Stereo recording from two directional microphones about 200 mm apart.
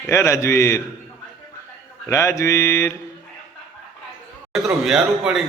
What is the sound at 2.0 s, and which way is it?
Speech, 15° left (ahead or behind).